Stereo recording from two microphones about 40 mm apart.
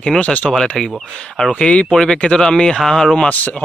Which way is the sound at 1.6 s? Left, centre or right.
Left.